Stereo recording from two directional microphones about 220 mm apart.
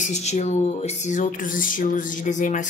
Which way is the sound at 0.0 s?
30° left (ahead or behind).